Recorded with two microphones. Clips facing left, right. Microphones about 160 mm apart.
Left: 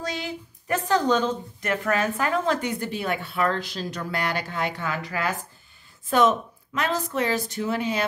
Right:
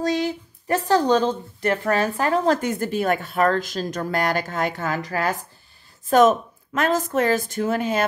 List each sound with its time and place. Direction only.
0.0 s speech: 40° right (ahead or behind)